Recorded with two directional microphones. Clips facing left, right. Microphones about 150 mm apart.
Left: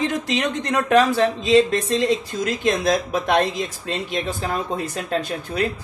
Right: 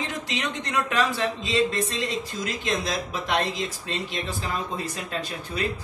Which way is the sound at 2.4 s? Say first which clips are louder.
Left 8 dB; 50° left (ahead or behind).